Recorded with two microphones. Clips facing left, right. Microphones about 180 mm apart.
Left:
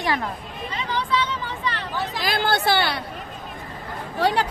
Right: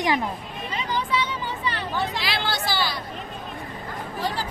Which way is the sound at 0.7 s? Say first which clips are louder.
Left 1 dB; 10° right (ahead or behind).